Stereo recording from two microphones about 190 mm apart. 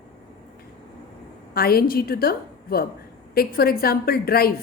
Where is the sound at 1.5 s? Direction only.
50° left (ahead or behind).